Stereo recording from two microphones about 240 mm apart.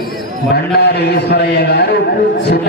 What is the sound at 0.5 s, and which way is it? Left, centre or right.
A man's voice, left.